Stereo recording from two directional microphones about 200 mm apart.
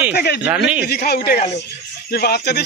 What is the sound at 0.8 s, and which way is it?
Speech, 50° left (ahead or behind).